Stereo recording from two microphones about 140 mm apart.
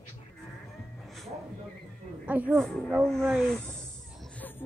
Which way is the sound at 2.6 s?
5° left (ahead or behind).